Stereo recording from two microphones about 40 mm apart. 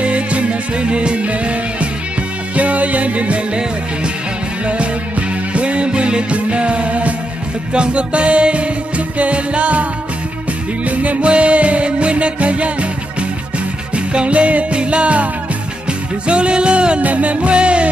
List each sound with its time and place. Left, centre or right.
0.0 s music: right
4.6 s music: right
10.8 s music: right
17.0 s music: right